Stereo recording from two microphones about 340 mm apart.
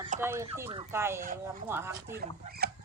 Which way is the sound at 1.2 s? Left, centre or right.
Right.